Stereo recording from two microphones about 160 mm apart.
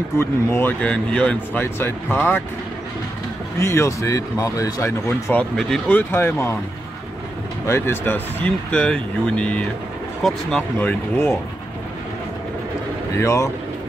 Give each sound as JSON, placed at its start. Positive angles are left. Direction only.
{"t": 0.2, "sound": "speech", "side_deg": 15}
{"t": 3.5, "sound": "speech", "side_deg": 15}
{"t": 7.6, "sound": "speech", "side_deg": 15}
{"t": 13.1, "sound": "speech", "side_deg": 15}